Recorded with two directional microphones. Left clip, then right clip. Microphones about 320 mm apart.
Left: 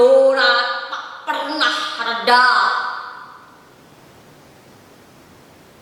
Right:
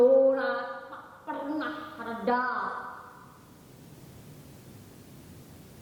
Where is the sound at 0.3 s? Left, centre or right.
Centre.